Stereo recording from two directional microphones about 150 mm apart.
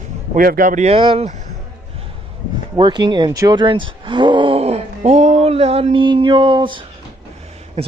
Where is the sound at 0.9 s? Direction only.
40° right (ahead or behind).